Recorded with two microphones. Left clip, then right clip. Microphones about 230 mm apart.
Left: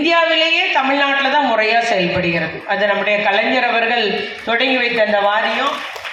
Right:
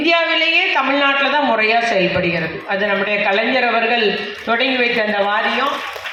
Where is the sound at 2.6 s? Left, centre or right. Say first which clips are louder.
Left 2 dB; left.